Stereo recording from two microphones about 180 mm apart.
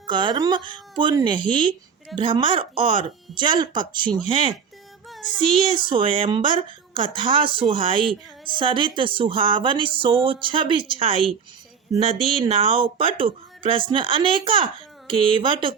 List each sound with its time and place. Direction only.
0.1 s speech: 25° right (ahead or behind)
5.6 s speech: 30° right (ahead or behind)